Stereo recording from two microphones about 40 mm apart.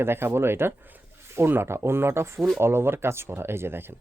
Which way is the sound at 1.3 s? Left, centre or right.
Right.